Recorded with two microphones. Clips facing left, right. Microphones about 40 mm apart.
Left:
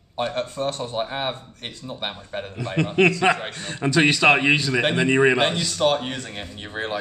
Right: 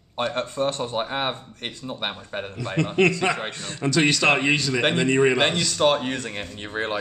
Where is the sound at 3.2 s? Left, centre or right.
Centre.